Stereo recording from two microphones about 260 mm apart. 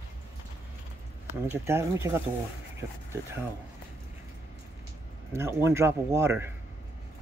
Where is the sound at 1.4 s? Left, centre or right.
Centre.